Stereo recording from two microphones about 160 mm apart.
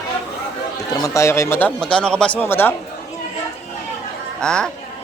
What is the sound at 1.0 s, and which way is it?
A man's voice, 20° left (ahead or behind).